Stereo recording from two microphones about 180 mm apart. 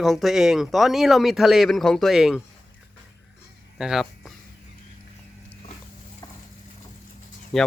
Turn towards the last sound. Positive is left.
turn(degrees=0)  # may be behind; listen again after turning